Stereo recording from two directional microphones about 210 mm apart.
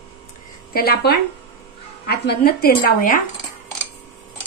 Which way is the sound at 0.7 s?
50° left (ahead or behind).